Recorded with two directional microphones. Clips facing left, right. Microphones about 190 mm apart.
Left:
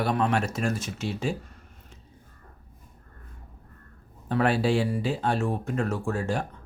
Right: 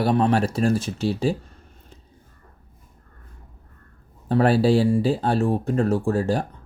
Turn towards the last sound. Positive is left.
turn(degrees=-35)  # may be behind; listen again after turning